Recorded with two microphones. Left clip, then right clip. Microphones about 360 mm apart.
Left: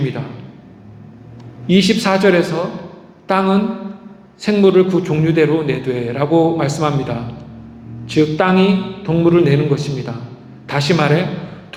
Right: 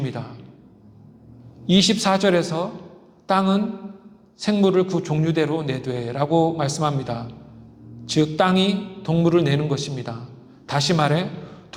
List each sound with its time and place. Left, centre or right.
0.0 s a man's voice: right
1.6 s a man's voice: right